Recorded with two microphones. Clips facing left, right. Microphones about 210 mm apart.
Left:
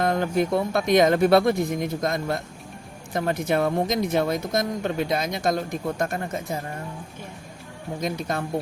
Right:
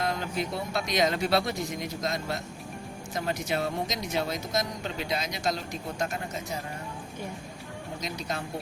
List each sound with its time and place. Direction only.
0.0 s speech: 55° left (ahead or behind)
8.0 s speech: 55° left (ahead or behind)